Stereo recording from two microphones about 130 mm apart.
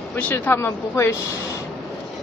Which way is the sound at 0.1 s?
15° left (ahead or behind).